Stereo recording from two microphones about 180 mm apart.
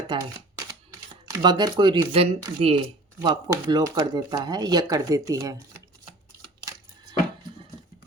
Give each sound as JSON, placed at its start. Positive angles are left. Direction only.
{"t": 0.1, "sound": "speech", "side_deg": -25}
{"t": 1.3, "sound": "speech", "side_deg": -25}